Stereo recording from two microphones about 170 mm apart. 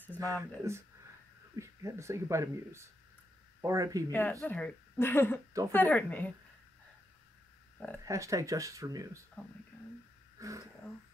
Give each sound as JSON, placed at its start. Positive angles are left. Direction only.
{"t": 0.2, "sound": "speech", "side_deg": -20}
{"t": 1.6, "sound": "speech", "side_deg": -20}
{"t": 4.1, "sound": "a woman's voice", "side_deg": 10}
{"t": 8.0, "sound": "speech", "side_deg": -20}
{"t": 10.4, "sound": "speech", "side_deg": -20}